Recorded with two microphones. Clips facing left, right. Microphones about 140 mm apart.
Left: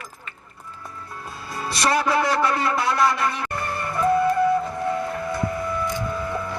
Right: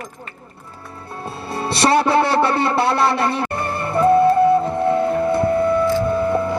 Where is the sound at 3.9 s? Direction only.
30° right (ahead or behind).